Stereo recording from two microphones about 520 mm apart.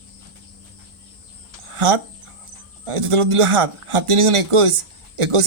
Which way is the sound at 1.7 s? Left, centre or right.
Right.